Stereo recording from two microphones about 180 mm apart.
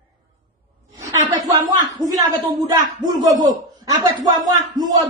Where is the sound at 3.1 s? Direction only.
20° right (ahead or behind).